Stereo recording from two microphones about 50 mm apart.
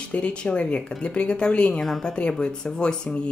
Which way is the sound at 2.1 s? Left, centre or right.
Left.